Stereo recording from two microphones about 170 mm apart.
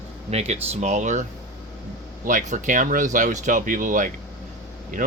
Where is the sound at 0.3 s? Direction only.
40° right (ahead or behind).